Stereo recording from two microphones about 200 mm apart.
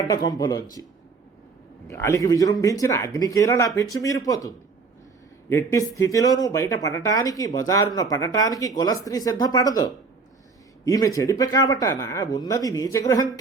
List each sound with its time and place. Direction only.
0.3 s speech: 20° left (ahead or behind)
1.9 s speech: 15° left (ahead or behind)